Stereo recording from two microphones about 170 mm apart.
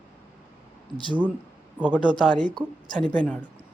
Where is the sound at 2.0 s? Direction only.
Centre (ahead or behind).